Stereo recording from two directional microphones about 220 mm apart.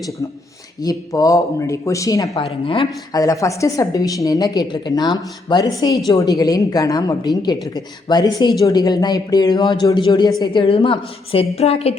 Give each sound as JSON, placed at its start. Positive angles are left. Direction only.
{"t": 0.8, "sound": "speech", "side_deg": 15}